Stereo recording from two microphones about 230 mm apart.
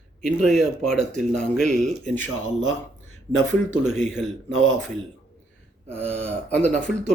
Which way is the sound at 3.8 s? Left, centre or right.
Left.